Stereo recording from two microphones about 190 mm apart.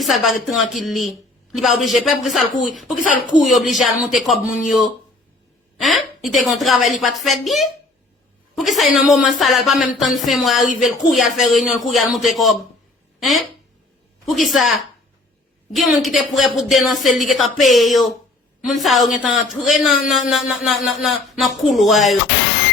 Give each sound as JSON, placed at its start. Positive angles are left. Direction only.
{"t": 0.0, "sound": "speech", "side_deg": 0}
{"t": 2.9, "sound": "speech", "side_deg": 45}
{"t": 3.4, "sound": "speech", "side_deg": 0}
{"t": 5.8, "sound": "speech", "side_deg": 0}